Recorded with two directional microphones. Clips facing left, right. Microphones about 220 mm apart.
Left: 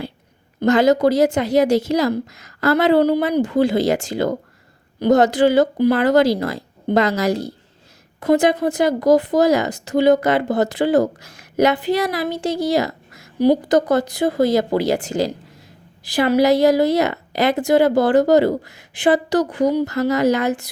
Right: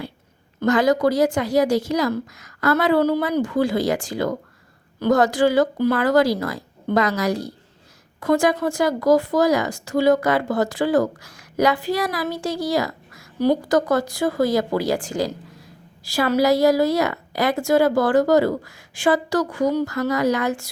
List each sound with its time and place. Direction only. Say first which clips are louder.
0.6 s speech: left 3 dB; 25° left (ahead or behind)